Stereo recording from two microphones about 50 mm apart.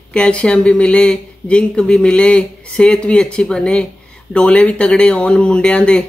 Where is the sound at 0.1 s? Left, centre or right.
Left.